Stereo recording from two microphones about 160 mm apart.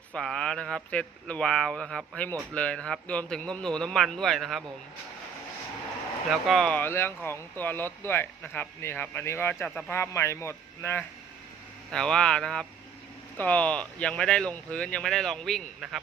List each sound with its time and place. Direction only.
0.1 s speech: 5° left (ahead or behind)
6.3 s speech: centre (ahead or behind)
9.6 s speech: 5° left (ahead or behind)
9.9 s speech: 15° left (ahead or behind)
11.9 s speech: 5° left (ahead or behind)